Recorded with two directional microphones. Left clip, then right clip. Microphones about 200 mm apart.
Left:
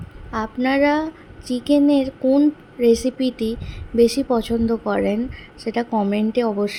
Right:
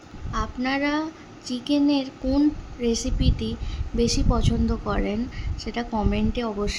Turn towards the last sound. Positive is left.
turn(degrees=20)  # may be behind; listen again after turning